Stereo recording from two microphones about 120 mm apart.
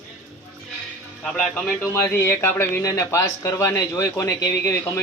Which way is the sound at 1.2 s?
5° left (ahead or behind).